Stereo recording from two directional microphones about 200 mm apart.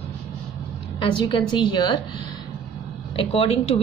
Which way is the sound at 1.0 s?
25° left (ahead or behind).